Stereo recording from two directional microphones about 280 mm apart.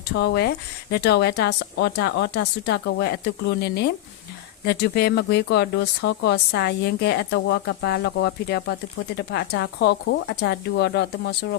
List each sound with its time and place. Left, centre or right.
0.2 s speech: left